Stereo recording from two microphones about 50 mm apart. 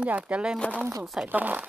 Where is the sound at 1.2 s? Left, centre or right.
Right.